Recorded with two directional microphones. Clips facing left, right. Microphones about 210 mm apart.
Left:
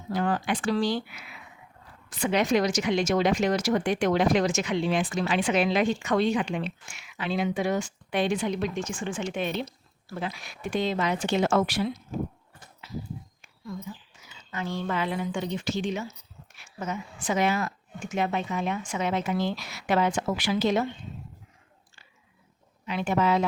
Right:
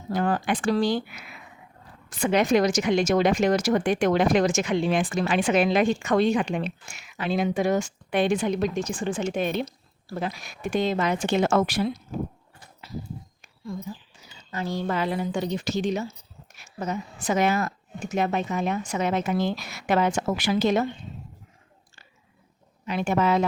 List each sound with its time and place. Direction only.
0.1 s a woman's voice: 45° right (ahead or behind)
12.8 s a sound: 35° right (ahead or behind)
14.3 s a woman's voice: 35° right (ahead or behind)
22.9 s a woman's voice: 45° right (ahead or behind)